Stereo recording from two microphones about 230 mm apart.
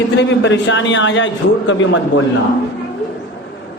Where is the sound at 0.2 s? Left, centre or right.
Left.